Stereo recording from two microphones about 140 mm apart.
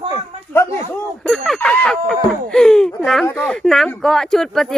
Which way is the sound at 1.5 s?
10° left (ahead or behind).